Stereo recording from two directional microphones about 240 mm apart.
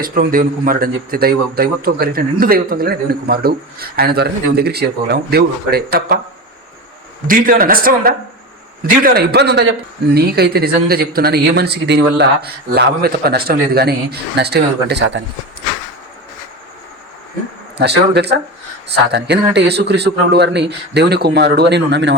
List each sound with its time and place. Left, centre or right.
0.0 s a man's voice: right
7.3 s a man's voice: right
17.7 s speech: right
19.5 s speech: right